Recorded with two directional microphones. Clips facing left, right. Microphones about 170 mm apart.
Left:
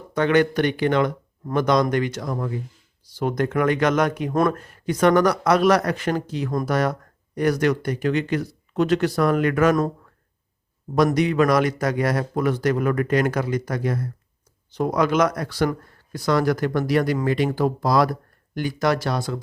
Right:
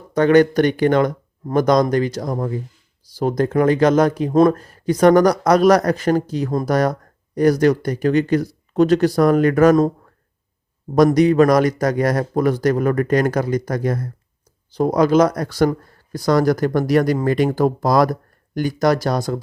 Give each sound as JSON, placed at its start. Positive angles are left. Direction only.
{"t": 0.1, "sound": "speech", "side_deg": -40}
{"t": 4.5, "sound": "speech", "side_deg": -35}
{"t": 10.9, "sound": "speech", "side_deg": -40}